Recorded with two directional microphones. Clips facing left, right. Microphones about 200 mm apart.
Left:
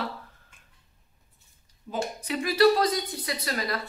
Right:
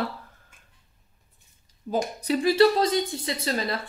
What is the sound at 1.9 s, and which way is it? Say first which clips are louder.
A woman's voice: right 5 dB; 35° right (ahead or behind).